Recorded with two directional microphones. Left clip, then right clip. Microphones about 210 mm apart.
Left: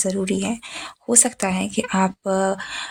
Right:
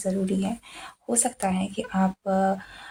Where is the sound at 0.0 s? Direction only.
40° left (ahead or behind).